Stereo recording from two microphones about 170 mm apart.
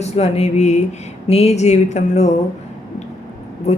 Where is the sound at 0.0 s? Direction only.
40° left (ahead or behind).